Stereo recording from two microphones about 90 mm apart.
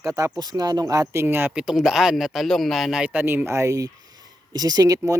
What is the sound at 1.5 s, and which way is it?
A man's voice, 5° right (ahead or behind).